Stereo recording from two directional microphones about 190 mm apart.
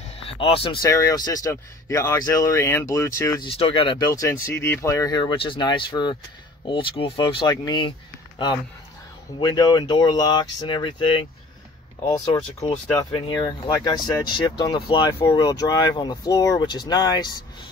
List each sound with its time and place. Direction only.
0.2 s speech: 30° left (ahead or behind)
0.8 s speech: 15° left (ahead or behind)
3.4 s speech: 30° left (ahead or behind)
9.4 s speech: 20° left (ahead or behind)